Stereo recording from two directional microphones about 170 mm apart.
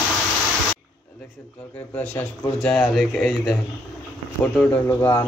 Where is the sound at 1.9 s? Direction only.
5° left (ahead or behind).